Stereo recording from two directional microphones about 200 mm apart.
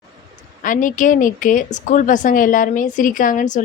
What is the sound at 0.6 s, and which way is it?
A woman's voice, 40° left (ahead or behind).